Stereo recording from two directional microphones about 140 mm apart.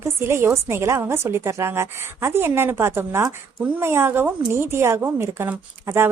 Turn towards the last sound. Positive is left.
turn(degrees=-15)  # may be behind; listen again after turning